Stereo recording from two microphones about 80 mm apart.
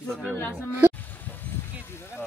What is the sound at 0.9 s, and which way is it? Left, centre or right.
Vehicle, left.